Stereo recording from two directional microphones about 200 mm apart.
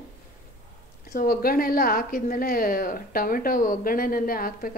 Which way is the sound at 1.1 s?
45° left (ahead or behind).